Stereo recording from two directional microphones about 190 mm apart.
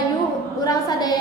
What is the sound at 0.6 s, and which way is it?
Speech, 20° left (ahead or behind).